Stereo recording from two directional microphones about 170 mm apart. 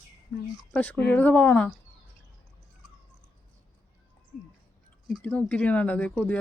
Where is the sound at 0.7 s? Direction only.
10° left (ahead or behind).